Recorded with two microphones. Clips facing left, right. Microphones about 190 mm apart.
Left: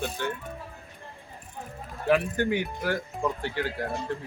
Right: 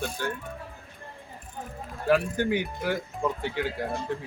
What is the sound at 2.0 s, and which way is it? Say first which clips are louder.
Speech: even; centre (ahead or behind).